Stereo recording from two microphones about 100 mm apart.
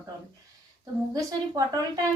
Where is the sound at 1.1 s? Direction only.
40° right (ahead or behind).